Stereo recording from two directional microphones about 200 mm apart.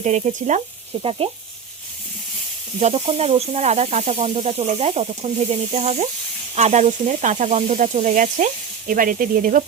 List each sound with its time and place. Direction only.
0.0 s speech: 35° right (ahead or behind)
0.9 s sizzle: 25° right (ahead or behind)
2.8 s speech: 30° right (ahead or behind)